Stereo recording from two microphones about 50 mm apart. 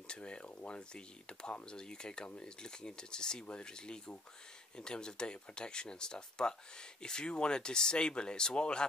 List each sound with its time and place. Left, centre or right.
0.1 s speech: centre